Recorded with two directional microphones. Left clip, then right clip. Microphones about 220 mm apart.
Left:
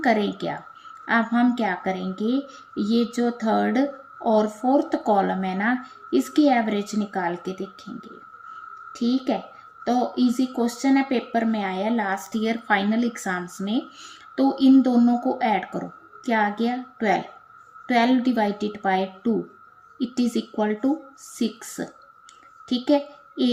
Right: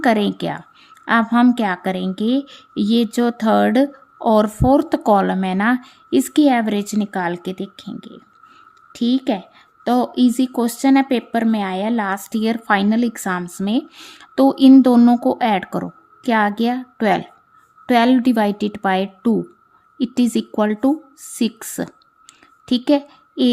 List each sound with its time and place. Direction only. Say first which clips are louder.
0.0 s a woman's voice: right 5 dB; 45° right (ahead or behind)